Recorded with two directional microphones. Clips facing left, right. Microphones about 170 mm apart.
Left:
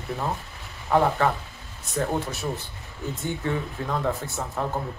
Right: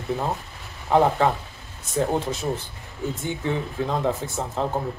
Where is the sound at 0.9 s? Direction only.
20° right (ahead or behind).